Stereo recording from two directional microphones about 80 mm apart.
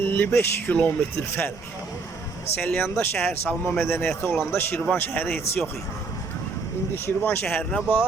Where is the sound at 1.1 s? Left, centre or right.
Left.